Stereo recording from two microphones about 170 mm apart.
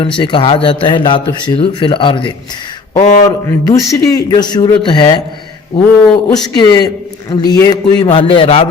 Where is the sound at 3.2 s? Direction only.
20° left (ahead or behind).